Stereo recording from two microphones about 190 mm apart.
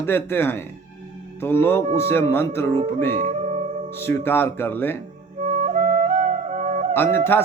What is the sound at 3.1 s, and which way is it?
Music, 40° right (ahead or behind).